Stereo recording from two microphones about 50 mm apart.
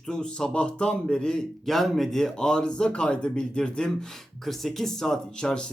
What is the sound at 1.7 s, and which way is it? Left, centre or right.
Speech, centre.